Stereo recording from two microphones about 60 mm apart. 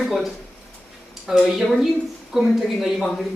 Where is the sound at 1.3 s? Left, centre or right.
Centre.